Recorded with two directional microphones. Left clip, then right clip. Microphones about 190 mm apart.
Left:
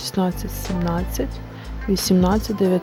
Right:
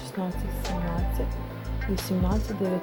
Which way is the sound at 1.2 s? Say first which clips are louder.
Left 8 dB; 40° left (ahead or behind).